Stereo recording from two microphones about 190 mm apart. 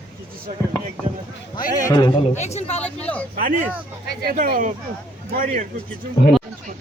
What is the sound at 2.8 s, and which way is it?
Speech, 5° left (ahead or behind).